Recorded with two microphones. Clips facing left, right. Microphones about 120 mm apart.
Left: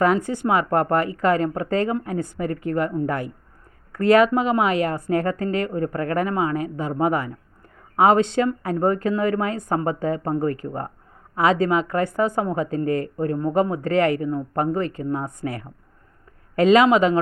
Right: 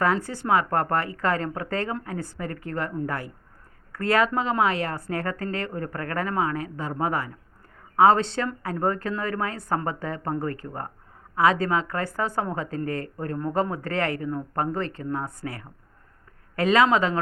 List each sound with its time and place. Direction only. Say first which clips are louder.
0.0 s a woman's voice: left 5 dB; 20° left (ahead or behind)